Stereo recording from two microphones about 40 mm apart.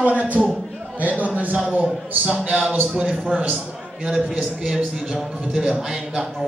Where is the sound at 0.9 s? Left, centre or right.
Right.